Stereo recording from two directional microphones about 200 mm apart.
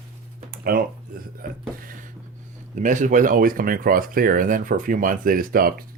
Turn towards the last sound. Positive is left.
turn(degrees=-45)  # may be behind; listen again after turning